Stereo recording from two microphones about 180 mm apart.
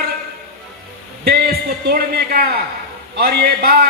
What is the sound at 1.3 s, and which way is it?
Speech, 55° right (ahead or behind).